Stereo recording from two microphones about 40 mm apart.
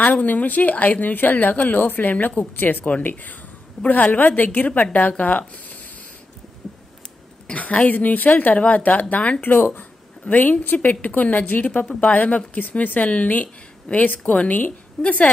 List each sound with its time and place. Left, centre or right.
0.0 s a woman's voice: left
7.5 s a woman's voice: left
9.4 s speech: left
10.2 s a woman's voice: left
15.0 s a woman's voice: centre